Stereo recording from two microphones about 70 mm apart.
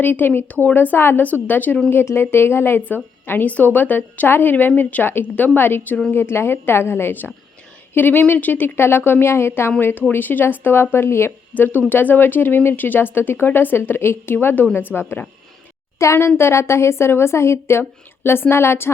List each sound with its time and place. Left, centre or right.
0.0 s a woman's voice: left
11.5 s speech: left
16.1 s a woman's voice: left